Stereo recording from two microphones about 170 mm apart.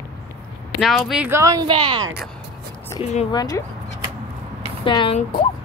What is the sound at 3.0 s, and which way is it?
Speech, 35° left (ahead or behind).